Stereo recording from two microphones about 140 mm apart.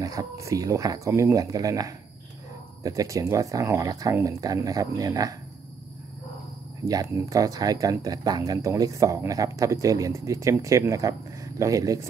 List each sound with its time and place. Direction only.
0.0 s speech: 25° right (ahead or behind)
6.8 s speech: 25° right (ahead or behind)